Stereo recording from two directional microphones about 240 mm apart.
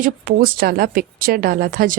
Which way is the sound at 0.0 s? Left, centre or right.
Right.